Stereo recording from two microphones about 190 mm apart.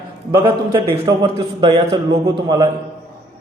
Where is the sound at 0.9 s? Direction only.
25° right (ahead or behind).